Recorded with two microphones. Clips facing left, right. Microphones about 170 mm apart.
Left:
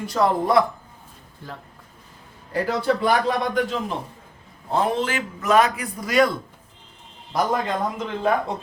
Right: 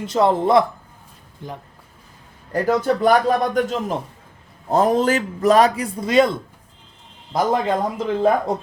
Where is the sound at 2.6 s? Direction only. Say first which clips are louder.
Right 5 dB; 45° right (ahead or behind); by 6.3 s 25° right (ahead or behind).